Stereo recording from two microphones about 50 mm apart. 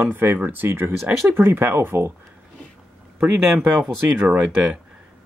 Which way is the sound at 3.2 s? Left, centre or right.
Right.